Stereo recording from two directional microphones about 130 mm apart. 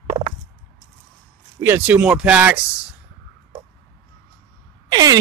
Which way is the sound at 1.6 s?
15° right (ahead or behind).